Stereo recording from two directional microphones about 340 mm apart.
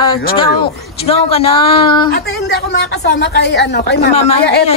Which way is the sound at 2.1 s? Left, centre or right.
Left.